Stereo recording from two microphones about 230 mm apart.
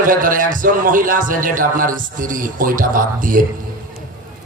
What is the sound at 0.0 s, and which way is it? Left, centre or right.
A man's voice, right.